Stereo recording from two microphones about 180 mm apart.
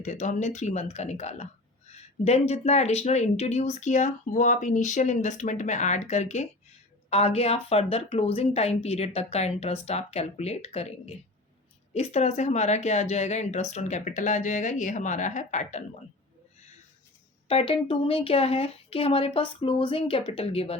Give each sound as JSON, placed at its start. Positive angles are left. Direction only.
{"t": 0.0, "sound": "speech", "side_deg": 40}
{"t": 17.5, "sound": "speech", "side_deg": 30}